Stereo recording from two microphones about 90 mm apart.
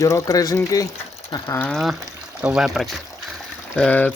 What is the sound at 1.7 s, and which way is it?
Speech, centre (ahead or behind).